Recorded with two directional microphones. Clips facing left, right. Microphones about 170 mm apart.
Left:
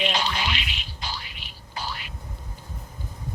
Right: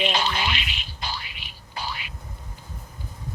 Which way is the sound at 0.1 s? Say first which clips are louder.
Right 1 dB; 55° right (ahead or behind).